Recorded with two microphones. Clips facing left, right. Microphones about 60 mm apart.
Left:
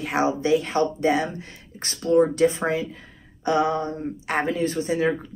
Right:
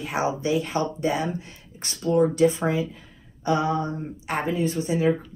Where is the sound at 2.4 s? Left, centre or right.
Left.